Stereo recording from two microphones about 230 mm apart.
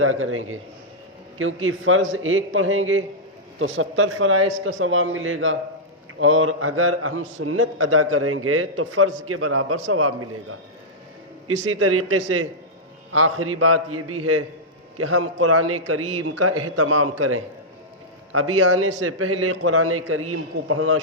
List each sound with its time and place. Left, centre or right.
0.0 s a man's voice: right
11.4 s a man's voice: right
18.9 s a man's voice: right